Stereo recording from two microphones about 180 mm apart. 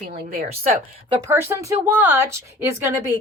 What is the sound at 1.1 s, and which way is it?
Speech, 15° right (ahead or behind).